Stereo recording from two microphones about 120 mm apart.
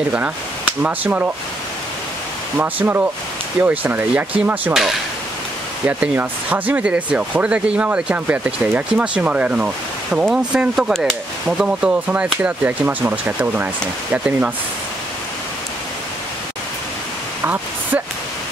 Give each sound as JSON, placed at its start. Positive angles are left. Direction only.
{"t": 0.8, "sound": "speech", "side_deg": -15}
{"t": 2.5, "sound": "speech", "side_deg": -15}
{"t": 5.9, "sound": "speech", "side_deg": -15}